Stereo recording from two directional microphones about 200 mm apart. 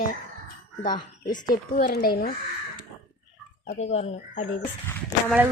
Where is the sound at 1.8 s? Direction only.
50° left (ahead or behind).